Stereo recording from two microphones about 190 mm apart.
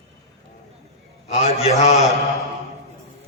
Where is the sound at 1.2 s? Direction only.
35° left (ahead or behind).